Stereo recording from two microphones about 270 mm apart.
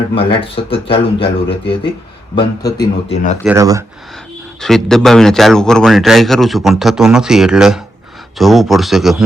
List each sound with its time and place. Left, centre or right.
0.1 s a man's voice: centre
3.4 s speech: centre
4.6 s a man's voice: centre